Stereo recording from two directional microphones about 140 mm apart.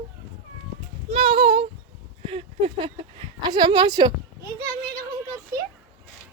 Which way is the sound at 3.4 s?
30° right (ahead or behind).